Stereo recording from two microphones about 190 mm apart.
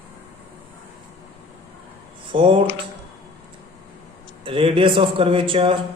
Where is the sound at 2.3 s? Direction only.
30° right (ahead or behind).